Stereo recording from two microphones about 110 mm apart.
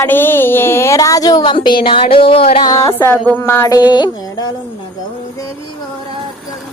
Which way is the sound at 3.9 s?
40° left (ahead or behind).